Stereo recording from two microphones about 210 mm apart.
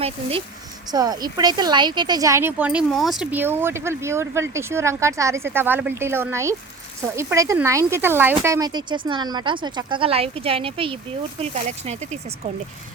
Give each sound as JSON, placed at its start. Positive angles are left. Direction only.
{"t": 0.0, "sound": "speech", "side_deg": -25}